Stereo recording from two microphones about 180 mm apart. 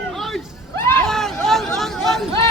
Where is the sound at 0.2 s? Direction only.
Centre (ahead or behind).